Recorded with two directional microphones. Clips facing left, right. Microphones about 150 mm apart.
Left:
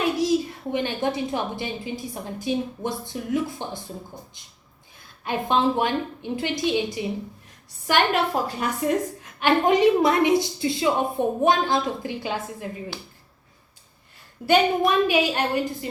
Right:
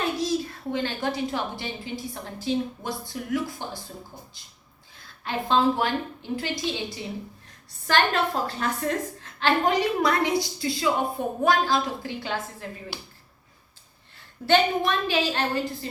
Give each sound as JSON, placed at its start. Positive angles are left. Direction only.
{"t": 0.2, "sound": "a woman's voice", "side_deg": 15}
{"t": 5.2, "sound": "a woman's voice", "side_deg": 15}
{"t": 14.4, "sound": "a woman's voice", "side_deg": 10}